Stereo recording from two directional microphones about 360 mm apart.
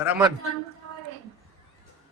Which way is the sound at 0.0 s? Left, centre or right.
Centre.